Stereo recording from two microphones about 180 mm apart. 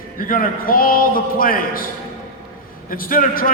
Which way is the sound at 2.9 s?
50° left (ahead or behind).